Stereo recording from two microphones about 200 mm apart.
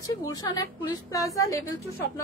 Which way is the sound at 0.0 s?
20° left (ahead or behind).